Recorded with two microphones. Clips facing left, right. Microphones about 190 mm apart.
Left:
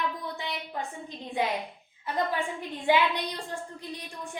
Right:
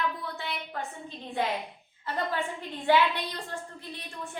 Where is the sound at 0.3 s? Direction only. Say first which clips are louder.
Left 1 dB; 15° left (ahead or behind).